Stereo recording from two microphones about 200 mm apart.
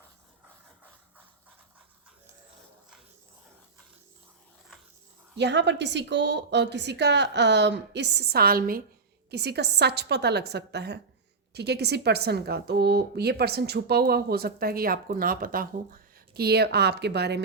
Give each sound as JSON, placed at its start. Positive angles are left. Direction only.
{"t": 5.4, "sound": "a woman's voice", "side_deg": -60}